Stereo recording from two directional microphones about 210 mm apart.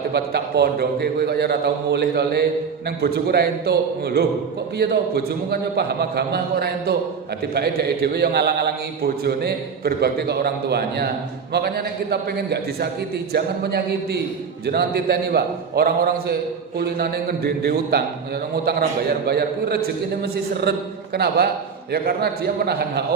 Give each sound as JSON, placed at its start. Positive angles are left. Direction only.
{"t": 0.1, "sound": "a man's voice", "side_deg": -50}
{"t": 19.3, "sound": "a man's voice", "side_deg": -50}